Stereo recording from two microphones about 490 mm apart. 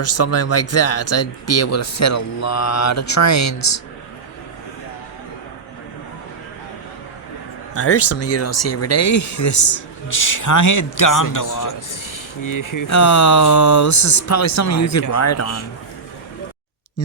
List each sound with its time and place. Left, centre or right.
0.0 s speech: left
7.7 s speech: left